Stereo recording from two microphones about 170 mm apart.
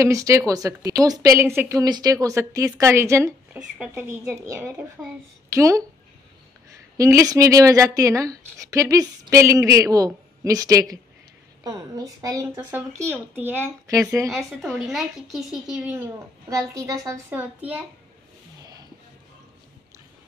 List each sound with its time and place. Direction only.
0.0 s speech: 20° right (ahead or behind)
3.5 s a woman's voice: 5° right (ahead or behind)
5.0 s a woman's voice: 5° right (ahead or behind)
5.5 s a woman's voice: 20° right (ahead or behind)
7.0 s speech: 20° right (ahead or behind)
14.8 s a woman's voice: centre (ahead or behind)